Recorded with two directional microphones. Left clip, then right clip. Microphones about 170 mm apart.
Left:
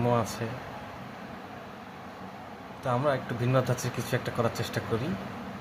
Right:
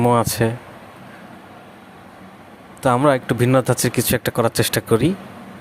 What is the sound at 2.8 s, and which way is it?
Speech, 65° right (ahead or behind).